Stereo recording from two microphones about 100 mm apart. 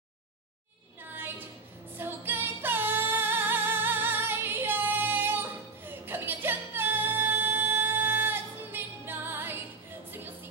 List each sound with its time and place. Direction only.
2.0 s music: 20° right (ahead or behind)